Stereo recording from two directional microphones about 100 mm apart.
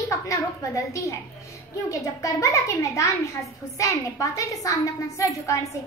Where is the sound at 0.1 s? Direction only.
30° left (ahead or behind).